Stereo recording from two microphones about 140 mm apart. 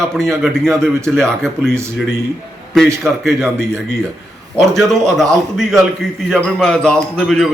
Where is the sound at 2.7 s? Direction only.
5° left (ahead or behind).